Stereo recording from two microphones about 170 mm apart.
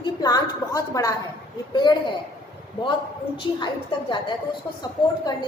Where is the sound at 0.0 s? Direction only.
20° left (ahead or behind).